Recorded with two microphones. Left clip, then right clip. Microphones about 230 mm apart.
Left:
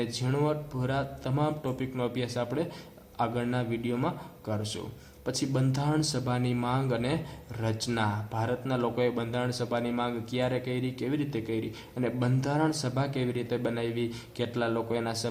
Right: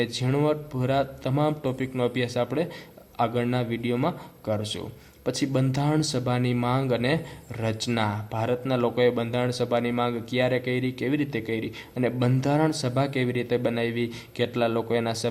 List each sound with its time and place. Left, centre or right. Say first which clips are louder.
0.0 s a man's voice: right 5 dB; right